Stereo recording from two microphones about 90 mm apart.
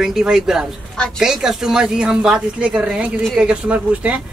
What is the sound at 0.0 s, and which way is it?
Speech, 5° right (ahead or behind).